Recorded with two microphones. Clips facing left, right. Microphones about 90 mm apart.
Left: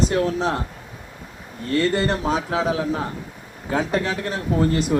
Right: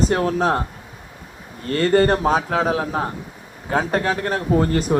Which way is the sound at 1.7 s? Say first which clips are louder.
Right 4 dB; 45° right (ahead or behind).